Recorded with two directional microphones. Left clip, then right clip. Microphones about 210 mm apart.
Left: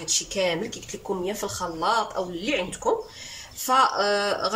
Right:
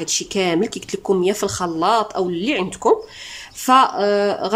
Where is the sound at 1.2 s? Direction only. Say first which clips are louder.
Right 9 dB; 45° right (ahead or behind).